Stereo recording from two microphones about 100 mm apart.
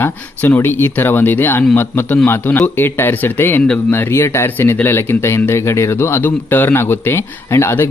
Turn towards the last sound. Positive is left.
turn(degrees=25)  # may be behind; listen again after turning